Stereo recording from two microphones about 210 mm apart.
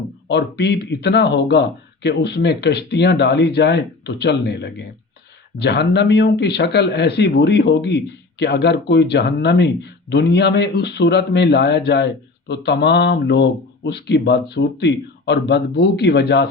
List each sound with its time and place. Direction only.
0.3 s speech: 55° left (ahead or behind)